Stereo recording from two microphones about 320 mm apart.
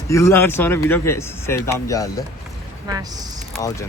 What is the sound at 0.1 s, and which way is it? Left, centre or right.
Speech, centre.